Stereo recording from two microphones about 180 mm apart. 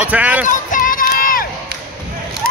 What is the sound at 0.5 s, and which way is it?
Crowd, 45° left (ahead or behind).